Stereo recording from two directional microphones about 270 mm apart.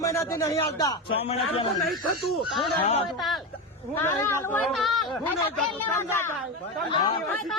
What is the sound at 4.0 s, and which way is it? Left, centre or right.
A man's voice, centre.